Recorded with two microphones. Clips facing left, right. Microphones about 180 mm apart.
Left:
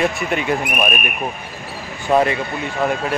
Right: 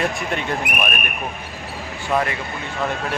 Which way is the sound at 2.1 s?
25° left (ahead or behind).